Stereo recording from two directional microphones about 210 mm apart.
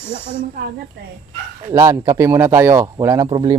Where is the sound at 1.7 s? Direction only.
15° right (ahead or behind).